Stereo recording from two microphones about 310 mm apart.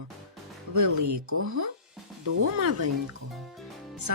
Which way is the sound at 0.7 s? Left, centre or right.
Right.